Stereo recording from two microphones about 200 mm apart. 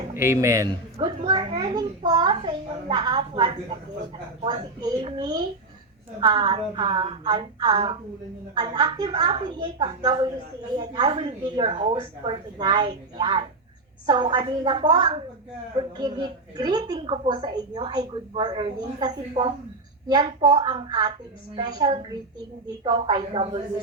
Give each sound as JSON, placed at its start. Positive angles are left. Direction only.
{"t": 0.1, "sound": "a man's voice", "side_deg": -10}
{"t": 0.9, "sound": "a woman's voice", "side_deg": -30}